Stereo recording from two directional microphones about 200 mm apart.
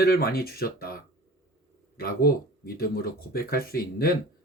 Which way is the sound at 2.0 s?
50° left (ahead or behind).